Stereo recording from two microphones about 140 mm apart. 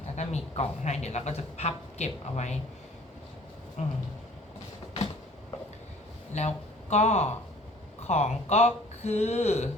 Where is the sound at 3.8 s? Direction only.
55° left (ahead or behind).